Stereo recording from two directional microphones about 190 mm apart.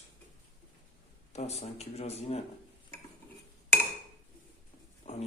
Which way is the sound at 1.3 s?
35° left (ahead or behind).